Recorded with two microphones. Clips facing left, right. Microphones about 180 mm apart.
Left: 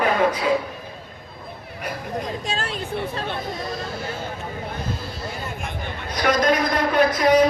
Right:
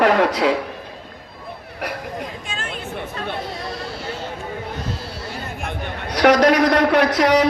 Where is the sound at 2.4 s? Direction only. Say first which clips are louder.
Left 3 dB; 35° left (ahead or behind).